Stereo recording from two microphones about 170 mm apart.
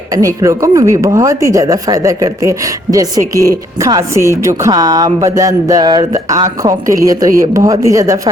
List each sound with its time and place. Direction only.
0.4 s speech: 20° right (ahead or behind)